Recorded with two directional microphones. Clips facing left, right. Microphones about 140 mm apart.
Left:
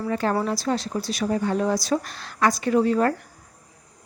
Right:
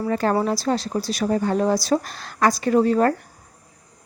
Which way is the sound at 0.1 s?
40° right (ahead or behind).